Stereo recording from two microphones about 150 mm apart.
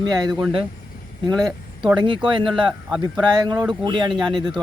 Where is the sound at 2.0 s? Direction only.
35° right (ahead or behind).